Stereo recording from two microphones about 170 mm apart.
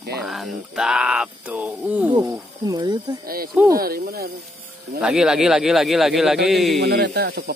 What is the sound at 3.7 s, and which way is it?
Speech, 60° right (ahead or behind).